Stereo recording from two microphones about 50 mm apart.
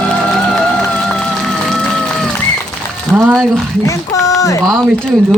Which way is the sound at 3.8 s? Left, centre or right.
Left.